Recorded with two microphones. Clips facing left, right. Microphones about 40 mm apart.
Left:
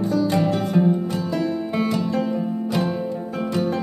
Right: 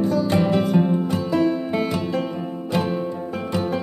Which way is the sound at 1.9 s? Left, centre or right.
Centre.